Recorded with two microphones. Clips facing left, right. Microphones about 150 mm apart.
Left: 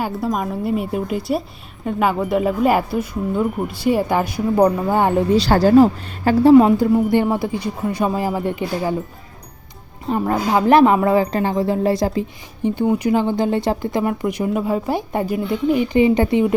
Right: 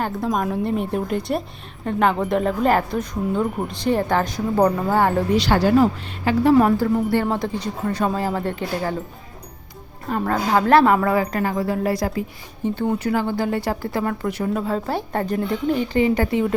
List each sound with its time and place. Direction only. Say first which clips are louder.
0.0 s a woman's voice: left 1 dB; 5° left (ahead or behind)
5.4 s speech: left 5 dB; 40° left (ahead or behind)
6.6 s a woman's voice: left 4 dB; 20° left (ahead or behind)
10.1 s a woman's voice: left 2 dB; 15° left (ahead or behind)
12.6 s speech: left 4 dB; 15° left (ahead or behind)